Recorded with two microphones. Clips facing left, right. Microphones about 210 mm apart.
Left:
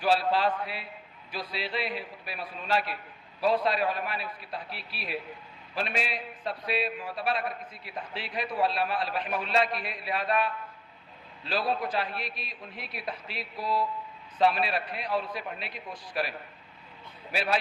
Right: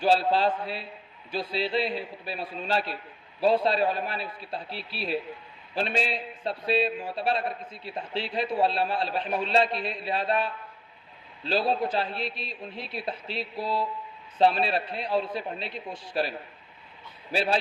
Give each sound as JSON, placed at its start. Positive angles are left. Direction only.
{"t": 0.0, "sound": "a man's voice", "side_deg": -25}
{"t": 17.3, "sound": "a man's voice", "side_deg": -30}